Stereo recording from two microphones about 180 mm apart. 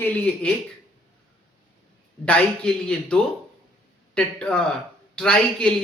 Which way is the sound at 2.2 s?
5° left (ahead or behind).